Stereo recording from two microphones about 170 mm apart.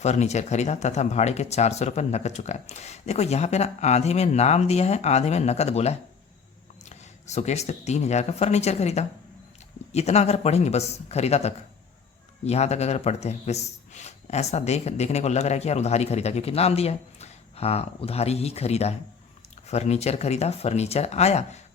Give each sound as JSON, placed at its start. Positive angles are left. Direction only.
{"t": 0.0, "sound": "speech", "side_deg": 40}